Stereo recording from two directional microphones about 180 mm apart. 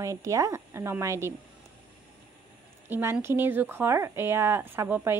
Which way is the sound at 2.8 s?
10° right (ahead or behind).